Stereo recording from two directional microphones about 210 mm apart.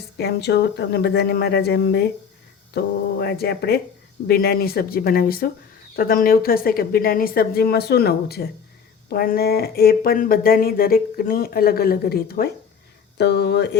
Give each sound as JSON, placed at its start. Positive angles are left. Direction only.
{"t": 0.2, "sound": "speech", "side_deg": 50}